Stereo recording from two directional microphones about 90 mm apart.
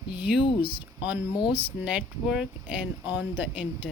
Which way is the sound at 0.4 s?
75° left (ahead or behind).